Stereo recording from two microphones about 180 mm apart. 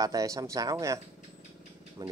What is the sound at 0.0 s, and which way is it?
Speech, 20° right (ahead or behind).